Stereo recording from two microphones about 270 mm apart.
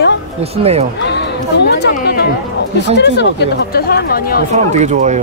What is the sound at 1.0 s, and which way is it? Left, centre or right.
Speech, left.